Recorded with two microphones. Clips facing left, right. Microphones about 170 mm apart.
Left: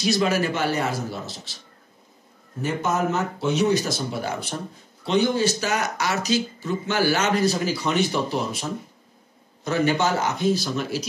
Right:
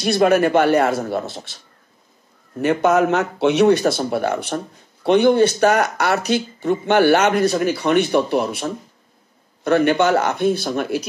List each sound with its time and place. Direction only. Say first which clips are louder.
0.0 s speech: right 7 dB; 55° right (ahead or behind)
2.6 s speech: right 8 dB; 65° right (ahead or behind)